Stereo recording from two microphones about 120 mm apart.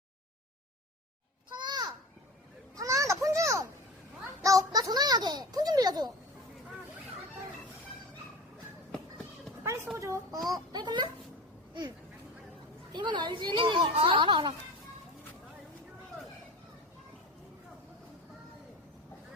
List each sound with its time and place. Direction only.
1.5 s children playing: 35° right (ahead or behind)
4.4 s a sound: 30° right (ahead or behind)
10.0 s a woman's voice: 25° right (ahead or behind)
12.9 s a woman's voice: 40° right (ahead or behind)